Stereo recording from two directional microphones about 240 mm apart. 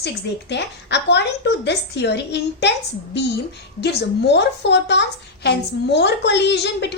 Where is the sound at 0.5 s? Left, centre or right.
Left.